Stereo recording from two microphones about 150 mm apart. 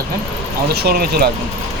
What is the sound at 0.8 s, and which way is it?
Speech, 90° right.